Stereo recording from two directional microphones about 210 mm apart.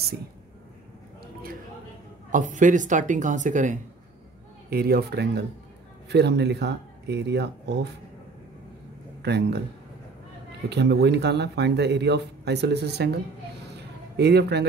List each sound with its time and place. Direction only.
1.2 s a sound: 45° right (ahead or behind)
2.3 s a woman's voice: 35° right (ahead or behind)
4.6 s speech: 45° right (ahead or behind)
9.2 s speech: 50° right (ahead or behind)
10.7 s speech: 55° right (ahead or behind)
14.1 s speech: 50° right (ahead or behind)